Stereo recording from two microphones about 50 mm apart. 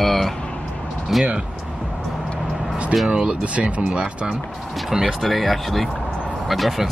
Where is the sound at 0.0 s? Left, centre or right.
Centre.